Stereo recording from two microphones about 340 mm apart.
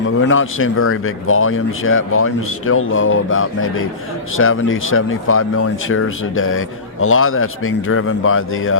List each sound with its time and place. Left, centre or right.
0.2 s speech: left